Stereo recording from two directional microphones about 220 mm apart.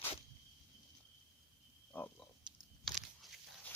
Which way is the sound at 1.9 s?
10° left (ahead or behind).